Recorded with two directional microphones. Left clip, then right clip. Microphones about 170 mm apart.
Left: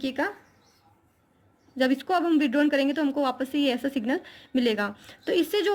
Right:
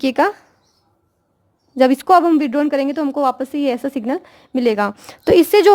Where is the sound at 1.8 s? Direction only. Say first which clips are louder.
Right 13 dB; 55° right (ahead or behind).